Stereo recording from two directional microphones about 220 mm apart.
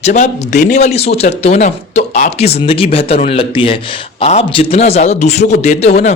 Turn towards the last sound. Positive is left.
turn(degrees=30)  # may be behind; listen again after turning